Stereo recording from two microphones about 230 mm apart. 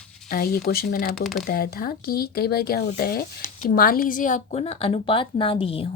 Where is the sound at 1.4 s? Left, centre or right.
Left.